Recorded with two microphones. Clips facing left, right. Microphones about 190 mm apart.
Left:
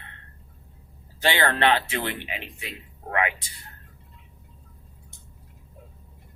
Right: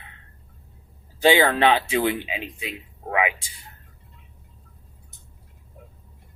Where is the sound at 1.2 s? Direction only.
10° right (ahead or behind).